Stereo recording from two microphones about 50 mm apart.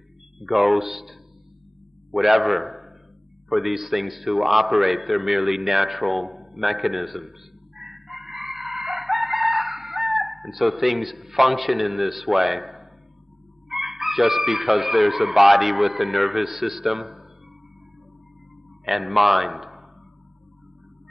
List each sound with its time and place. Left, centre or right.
0.4 s chicken: centre
2.0 s a man's voice: centre
13.7 s chicken: centre
18.9 s a man's voice: centre